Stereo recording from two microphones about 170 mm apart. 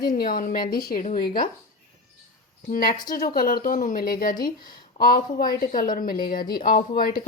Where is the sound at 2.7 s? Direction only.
55° left (ahead or behind).